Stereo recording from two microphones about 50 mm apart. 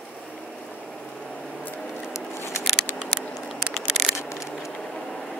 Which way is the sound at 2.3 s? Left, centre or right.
Left.